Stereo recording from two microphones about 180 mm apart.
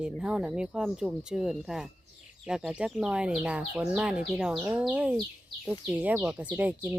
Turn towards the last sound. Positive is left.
turn(degrees=-10)  # may be behind; listen again after turning